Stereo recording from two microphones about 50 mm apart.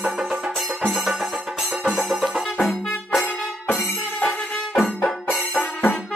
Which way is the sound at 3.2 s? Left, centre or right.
Left.